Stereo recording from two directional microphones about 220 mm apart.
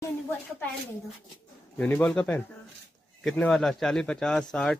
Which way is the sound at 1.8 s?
5° left (ahead or behind).